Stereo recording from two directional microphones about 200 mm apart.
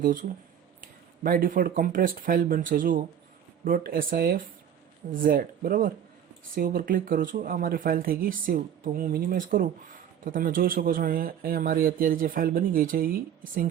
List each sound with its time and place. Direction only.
0.0 s speech: 40° right (ahead or behind)